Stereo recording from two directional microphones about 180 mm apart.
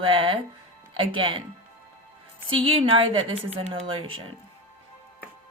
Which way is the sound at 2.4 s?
30° right (ahead or behind).